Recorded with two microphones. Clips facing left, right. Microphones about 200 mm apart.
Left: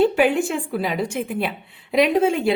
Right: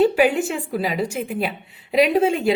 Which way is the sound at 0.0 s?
40° right (ahead or behind).